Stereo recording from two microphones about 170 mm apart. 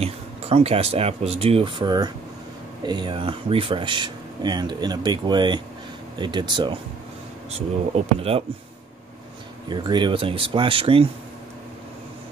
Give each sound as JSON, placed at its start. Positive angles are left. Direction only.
{"t": 0.0, "sound": "speech", "side_deg": -35}
{"t": 9.7, "sound": "speech", "side_deg": -25}